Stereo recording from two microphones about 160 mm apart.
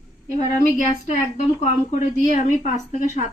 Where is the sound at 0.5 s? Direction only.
50° left (ahead or behind).